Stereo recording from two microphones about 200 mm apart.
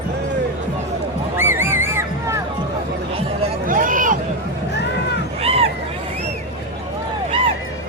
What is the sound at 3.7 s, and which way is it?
Hubbub, 40° right (ahead or behind).